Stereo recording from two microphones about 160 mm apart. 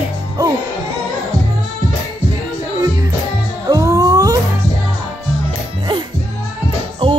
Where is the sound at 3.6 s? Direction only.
20° right (ahead or behind).